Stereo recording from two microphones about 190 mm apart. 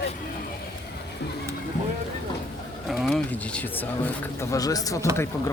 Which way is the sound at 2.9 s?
Centre (ahead or behind).